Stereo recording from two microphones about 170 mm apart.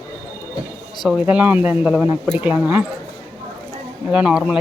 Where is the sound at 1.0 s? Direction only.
5° right (ahead or behind).